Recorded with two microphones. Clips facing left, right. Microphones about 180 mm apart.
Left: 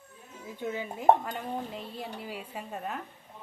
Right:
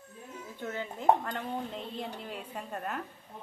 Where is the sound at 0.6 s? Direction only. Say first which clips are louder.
Left 3 dB; 15° left (ahead or behind).